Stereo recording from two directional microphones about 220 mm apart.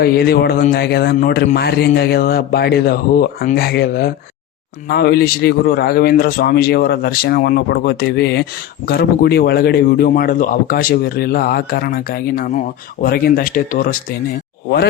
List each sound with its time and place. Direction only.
0.0 s speech: 45° left (ahead or behind)